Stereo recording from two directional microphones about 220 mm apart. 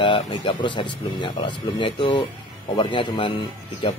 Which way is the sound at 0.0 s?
25° left (ahead or behind).